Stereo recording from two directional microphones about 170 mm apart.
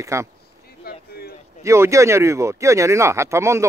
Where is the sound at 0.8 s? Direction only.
65° left (ahead or behind).